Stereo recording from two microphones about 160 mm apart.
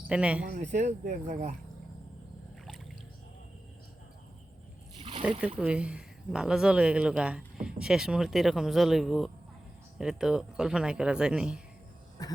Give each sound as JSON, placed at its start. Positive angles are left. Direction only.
{"t": 0.1, "sound": "speech", "side_deg": -5}
{"t": 0.5, "sound": "speech", "side_deg": -50}
{"t": 4.9, "sound": "a sound", "side_deg": -35}
{"t": 5.5, "sound": "speech", "side_deg": -5}
{"t": 12.2, "sound": "cough", "side_deg": 20}